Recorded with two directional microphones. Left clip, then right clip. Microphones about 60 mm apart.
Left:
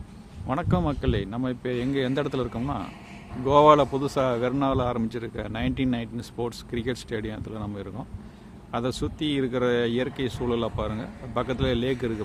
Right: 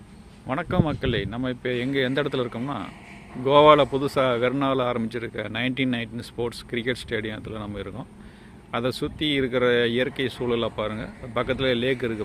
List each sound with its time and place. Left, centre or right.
0.4 s a man's voice: left
1.0 s speech: centre
2.6 s speech: centre